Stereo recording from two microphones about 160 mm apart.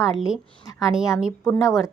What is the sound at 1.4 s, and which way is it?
Speech, 20° left (ahead or behind).